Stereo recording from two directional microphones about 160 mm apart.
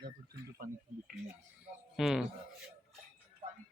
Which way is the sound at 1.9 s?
Centre (ahead or behind).